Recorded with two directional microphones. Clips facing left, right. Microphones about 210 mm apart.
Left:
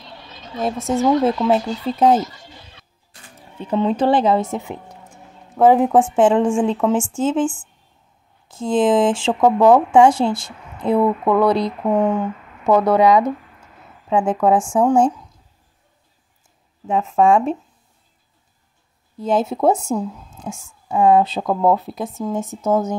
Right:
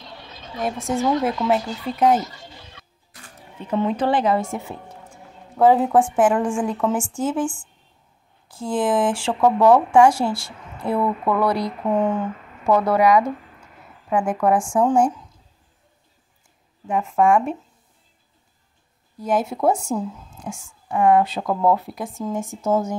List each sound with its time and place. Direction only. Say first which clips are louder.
0.8 s speech: left 5 dB; 25° left (ahead or behind)
3.7 s speech: left 4 dB; 25° left (ahead or behind)
16.8 s speech: left 3 dB; 20° left (ahead or behind)
19.1 s speech: left 3 dB; 25° left (ahead or behind)